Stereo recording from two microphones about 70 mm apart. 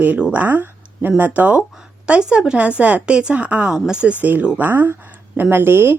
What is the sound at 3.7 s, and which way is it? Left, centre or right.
Speech, centre.